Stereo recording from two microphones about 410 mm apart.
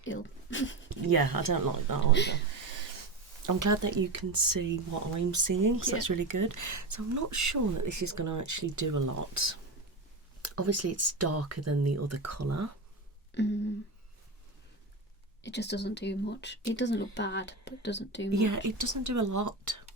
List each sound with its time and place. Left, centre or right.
0.0 s speech: left
1.0 s speech: right
2.1 s speech: left
3.4 s speech: right
13.3 s a sound: left
15.4 s speech: left
18.3 s speech: right